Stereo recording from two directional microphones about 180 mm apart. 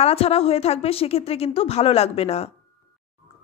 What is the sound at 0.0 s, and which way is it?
Speech, 35° left (ahead or behind).